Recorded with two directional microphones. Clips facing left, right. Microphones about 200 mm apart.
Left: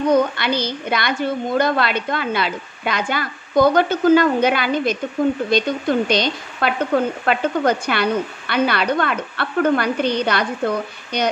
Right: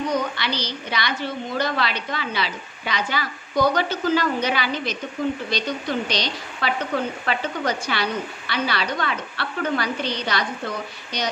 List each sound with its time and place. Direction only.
0.1 s speech: 50° left (ahead or behind)